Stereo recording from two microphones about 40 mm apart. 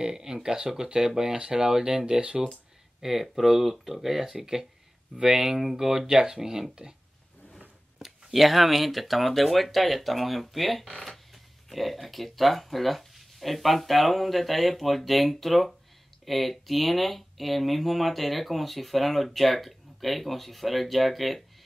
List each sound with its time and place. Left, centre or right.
0.0 s speech: centre
3.0 s speech: centre
8.0 s speech: centre